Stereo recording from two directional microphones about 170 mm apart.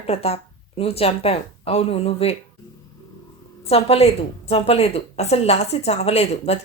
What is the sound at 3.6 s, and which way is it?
Speech, 35° left (ahead or behind).